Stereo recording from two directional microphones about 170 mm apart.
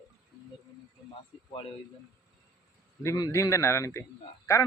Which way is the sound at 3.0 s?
20° left (ahead or behind).